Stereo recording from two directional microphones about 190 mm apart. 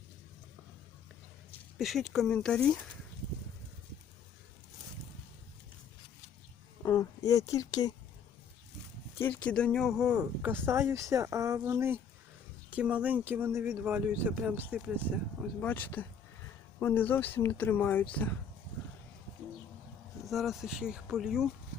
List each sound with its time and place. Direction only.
1.8 s speech: centre (ahead or behind)
6.8 s speech: 15° left (ahead or behind)
9.1 s speech: 10° left (ahead or behind); by 14.9 s 10° right (ahead or behind)
15.6 s speech: 10° left (ahead or behind)
20.2 s speech: centre (ahead or behind)